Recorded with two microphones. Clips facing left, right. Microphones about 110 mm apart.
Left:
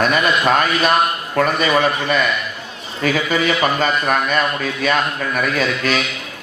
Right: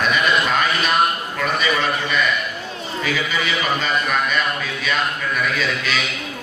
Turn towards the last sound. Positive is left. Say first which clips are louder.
# left 4 dB
turn(degrees=45)  # may be behind; listen again after turning